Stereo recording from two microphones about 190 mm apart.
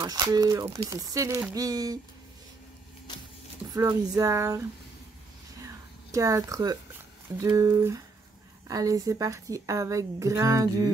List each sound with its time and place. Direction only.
0.0 s speech: 20° right (ahead or behind)
3.7 s speech: 20° right (ahead or behind)
6.1 s speech: 15° right (ahead or behind)